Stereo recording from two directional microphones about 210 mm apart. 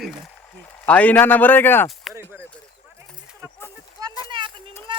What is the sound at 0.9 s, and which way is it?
Speech, 5° left (ahead or behind).